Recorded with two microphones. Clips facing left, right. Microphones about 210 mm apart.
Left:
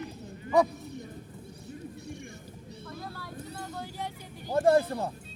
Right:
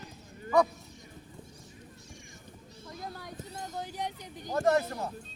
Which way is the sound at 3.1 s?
20° right (ahead or behind).